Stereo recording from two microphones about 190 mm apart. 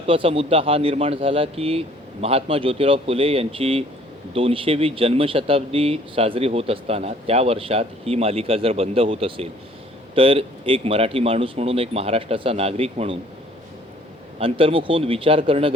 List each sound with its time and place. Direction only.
0.0 s speech: 30° right (ahead or behind)
14.3 s speech: 30° right (ahead or behind)